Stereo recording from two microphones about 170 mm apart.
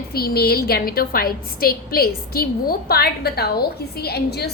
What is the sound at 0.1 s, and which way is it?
A woman's voice, 65° left (ahead or behind).